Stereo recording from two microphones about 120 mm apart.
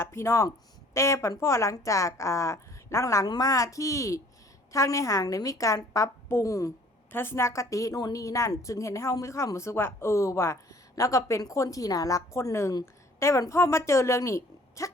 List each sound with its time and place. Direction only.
0.0 s a woman's voice: 20° left (ahead or behind)